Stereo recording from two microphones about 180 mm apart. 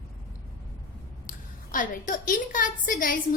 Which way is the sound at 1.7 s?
45° left (ahead or behind).